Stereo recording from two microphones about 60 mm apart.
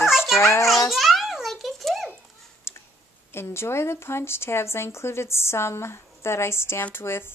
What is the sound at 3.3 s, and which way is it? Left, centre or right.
A woman's voice, left.